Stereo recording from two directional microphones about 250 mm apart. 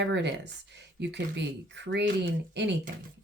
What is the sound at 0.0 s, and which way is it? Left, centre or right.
Speech, right.